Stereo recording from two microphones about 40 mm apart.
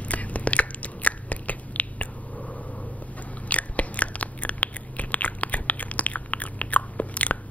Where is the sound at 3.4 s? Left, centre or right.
Left.